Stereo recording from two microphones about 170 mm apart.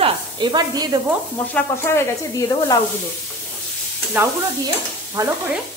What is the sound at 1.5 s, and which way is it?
Speech, 20° left (ahead or behind).